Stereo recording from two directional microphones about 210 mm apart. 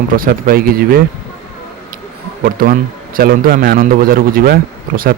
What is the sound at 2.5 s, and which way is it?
A man's voice, 40° right (ahead or behind).